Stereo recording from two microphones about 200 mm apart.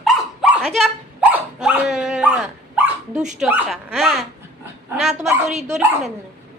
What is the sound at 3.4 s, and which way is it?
Speech, centre (ahead or behind).